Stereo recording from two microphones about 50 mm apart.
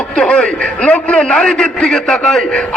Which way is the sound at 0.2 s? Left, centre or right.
Centre.